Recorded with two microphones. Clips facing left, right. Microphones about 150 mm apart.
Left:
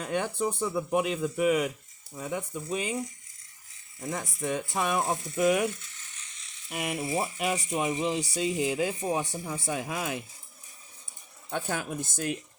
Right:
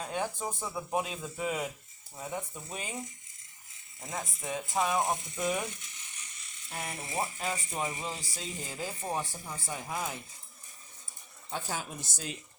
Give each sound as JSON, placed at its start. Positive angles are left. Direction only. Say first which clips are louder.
{"t": 0.0, "sound": "speech", "louder": "left 5 dB", "side_deg": 70}
{"t": 2.1, "sound": "speech", "louder": "left 5 dB", "side_deg": 90}
{"t": 4.7, "sound": "speech", "louder": "right 2 dB", "side_deg": 65}
{"t": 5.8, "sound": "mechanisms", "louder": "even", "side_deg": -15}
{"t": 6.7, "sound": "speech", "louder": "left 8 dB", "side_deg": 90}
{"t": 11.5, "sound": "speech", "louder": "left 5 dB", "side_deg": 60}